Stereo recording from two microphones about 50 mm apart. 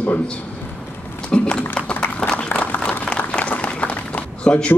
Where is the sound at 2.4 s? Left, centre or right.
Left.